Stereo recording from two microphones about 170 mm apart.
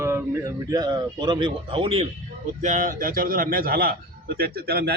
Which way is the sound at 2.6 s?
50° right (ahead or behind).